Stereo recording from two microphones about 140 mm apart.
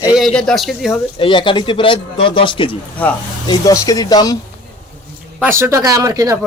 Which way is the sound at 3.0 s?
10° left (ahead or behind).